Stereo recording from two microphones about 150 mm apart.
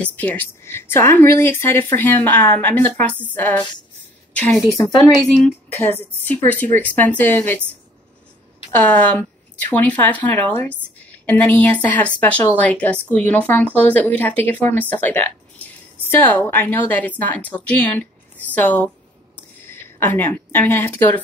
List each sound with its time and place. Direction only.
0.0 s a woman's voice: 10° left (ahead or behind)
4.7 s speech: 25° left (ahead or behind)
5.9 s speech: 10° left (ahead or behind)
8.8 s speech: 10° left (ahead or behind)
19.6 s a sound: 15° left (ahead or behind)